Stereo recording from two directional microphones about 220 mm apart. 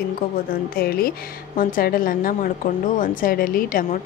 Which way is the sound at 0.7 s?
45° left (ahead or behind).